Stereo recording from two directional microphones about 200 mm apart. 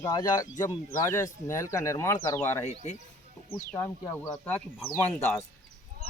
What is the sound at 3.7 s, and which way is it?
Speech, 10° left (ahead or behind).